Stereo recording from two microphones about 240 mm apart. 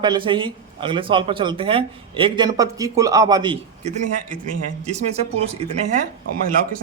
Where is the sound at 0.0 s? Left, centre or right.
Centre.